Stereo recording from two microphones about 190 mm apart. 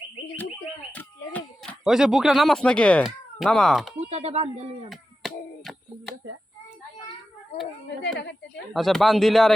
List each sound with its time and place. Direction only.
1.8 s speech: centre (ahead or behind)
4.1 s speech: 35° right (ahead or behind)
7.9 s speech: 65° left (ahead or behind)
8.7 s speech: centre (ahead or behind)